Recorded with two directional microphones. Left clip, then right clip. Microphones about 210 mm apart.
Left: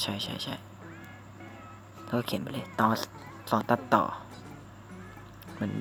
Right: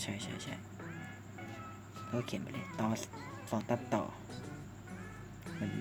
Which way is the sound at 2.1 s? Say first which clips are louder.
Left 8 dB; 20° left (ahead or behind).